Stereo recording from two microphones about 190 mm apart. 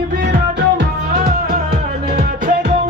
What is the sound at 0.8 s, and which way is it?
Music, 55° right (ahead or behind).